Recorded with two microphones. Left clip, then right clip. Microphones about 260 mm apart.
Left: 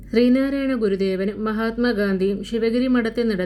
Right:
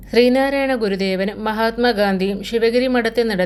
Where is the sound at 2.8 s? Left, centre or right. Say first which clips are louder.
Right 4 dB; right.